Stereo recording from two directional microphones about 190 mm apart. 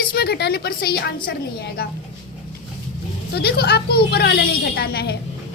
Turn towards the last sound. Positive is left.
turn(degrees=55)  # may be behind; listen again after turning